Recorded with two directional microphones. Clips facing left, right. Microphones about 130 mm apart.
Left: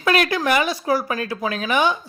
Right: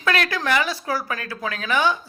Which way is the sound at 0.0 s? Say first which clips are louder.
Left 4 dB; 20° left (ahead or behind).